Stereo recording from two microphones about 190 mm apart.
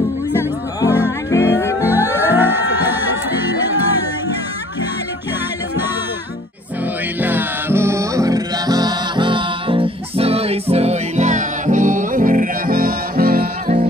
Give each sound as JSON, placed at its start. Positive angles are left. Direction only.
{"t": 1.3, "sound": "music", "side_deg": 15}
{"t": 1.9, "sound": "music", "side_deg": -10}
{"t": 7.2, "sound": "music", "side_deg": -10}